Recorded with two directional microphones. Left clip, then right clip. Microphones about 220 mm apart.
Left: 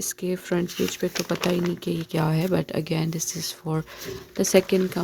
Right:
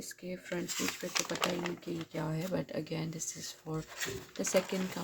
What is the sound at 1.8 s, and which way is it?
Speech, 50° left (ahead or behind).